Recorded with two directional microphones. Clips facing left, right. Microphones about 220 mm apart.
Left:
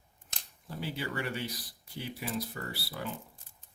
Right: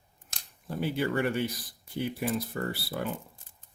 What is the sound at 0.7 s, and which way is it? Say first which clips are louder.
Speech: right 8 dB; 55° right (ahead or behind).